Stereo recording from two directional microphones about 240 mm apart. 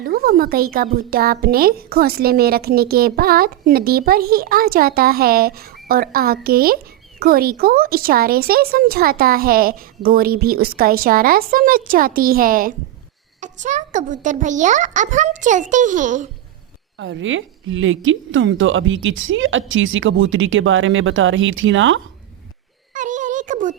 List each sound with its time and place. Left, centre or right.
0.0 s speech: right
17.0 s a woman's voice: right
23.0 s a sound: right